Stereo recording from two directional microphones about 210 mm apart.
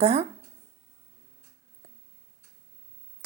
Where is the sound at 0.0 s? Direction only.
30° right (ahead or behind).